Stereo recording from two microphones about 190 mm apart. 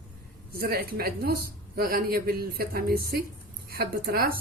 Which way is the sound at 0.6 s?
55° right (ahead or behind).